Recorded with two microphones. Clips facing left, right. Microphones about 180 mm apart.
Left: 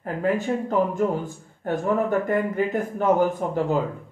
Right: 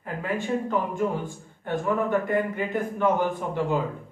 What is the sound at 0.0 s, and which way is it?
A man's voice, 40° left (ahead or behind).